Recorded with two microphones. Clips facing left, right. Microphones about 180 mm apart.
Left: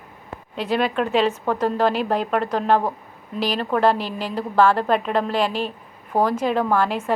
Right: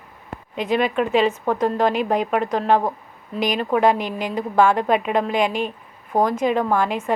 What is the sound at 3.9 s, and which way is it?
Speech, 35° left (ahead or behind).